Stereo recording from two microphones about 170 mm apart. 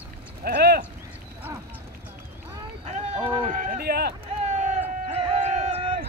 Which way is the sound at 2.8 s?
35° right (ahead or behind).